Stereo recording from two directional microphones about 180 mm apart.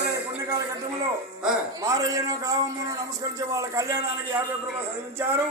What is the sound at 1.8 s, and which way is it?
A man's voice, 20° right (ahead or behind).